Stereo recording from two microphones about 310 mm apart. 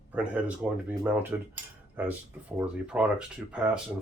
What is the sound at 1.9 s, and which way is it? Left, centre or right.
Cutlery, centre.